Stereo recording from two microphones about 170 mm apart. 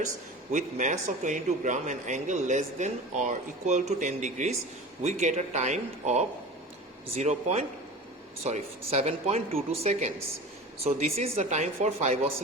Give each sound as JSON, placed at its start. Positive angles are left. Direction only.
{"t": 0.5, "sound": "a man's voice", "side_deg": -45}